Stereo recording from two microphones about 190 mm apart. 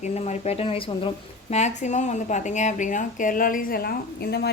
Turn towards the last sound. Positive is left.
turn(degrees=55)  # may be behind; listen again after turning